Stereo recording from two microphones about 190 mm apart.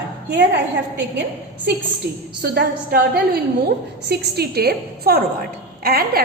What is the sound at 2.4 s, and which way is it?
Speech, 55° right (ahead or behind).